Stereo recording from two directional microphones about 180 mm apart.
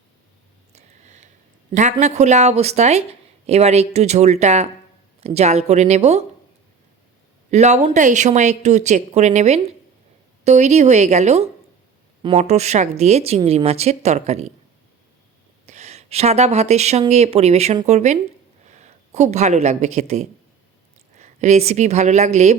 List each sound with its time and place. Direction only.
0.7 s a sound: 40° right (ahead or behind)
1.7 s speech: 40° right (ahead or behind)
7.5 s speech: 40° right (ahead or behind)
15.6 s speech: 40° right (ahead or behind)